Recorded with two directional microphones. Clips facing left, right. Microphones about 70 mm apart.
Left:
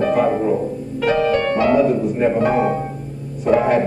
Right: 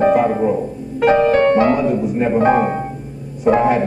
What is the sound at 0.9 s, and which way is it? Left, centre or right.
Music, right.